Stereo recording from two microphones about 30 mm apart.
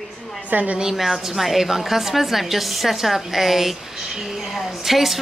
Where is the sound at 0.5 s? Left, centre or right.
Right.